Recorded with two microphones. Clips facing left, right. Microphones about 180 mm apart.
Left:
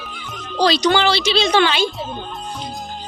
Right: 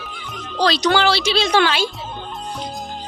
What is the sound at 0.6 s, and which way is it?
Speech, centre (ahead or behind).